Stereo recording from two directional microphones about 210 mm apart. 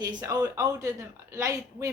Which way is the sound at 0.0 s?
20° right (ahead or behind).